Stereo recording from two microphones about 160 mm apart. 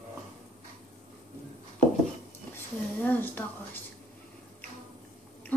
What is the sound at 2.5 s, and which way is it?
Speech, 10° left (ahead or behind).